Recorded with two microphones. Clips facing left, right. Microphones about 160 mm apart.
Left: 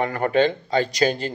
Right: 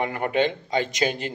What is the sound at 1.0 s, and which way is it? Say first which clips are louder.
Speech: left 4 dB; 35° left (ahead or behind).